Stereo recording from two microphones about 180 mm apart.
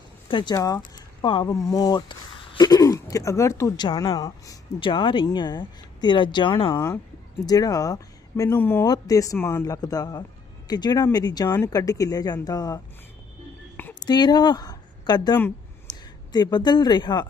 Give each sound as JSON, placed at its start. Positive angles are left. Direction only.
{"t": 0.3, "sound": "speech", "side_deg": 25}
{"t": 0.9, "sound": "a sound", "side_deg": 25}
{"t": 1.7, "sound": "speech", "side_deg": 20}
{"t": 14.0, "sound": "a woman's voice", "side_deg": 25}